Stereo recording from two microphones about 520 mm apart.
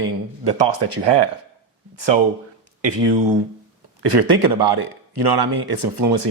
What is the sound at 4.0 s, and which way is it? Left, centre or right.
Speech, right.